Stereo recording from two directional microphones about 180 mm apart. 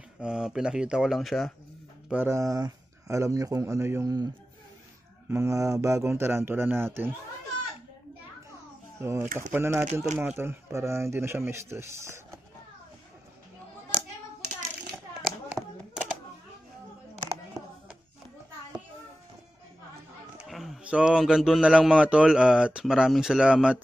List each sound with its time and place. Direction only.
0.2 s speech: 5° right (ahead or behind)
2.0 s speech: 10° right (ahead or behind)
5.3 s speech: 15° right (ahead or behind)
9.0 s speech: 15° right (ahead or behind)
15.2 s a sound: centre (ahead or behind)
20.3 s speech: centre (ahead or behind)